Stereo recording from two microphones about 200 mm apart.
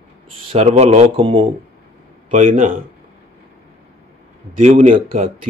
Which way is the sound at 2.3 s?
40° right (ahead or behind).